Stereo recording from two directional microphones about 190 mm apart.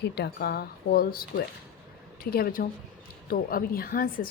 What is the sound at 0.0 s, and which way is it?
A woman's voice, 60° left (ahead or behind).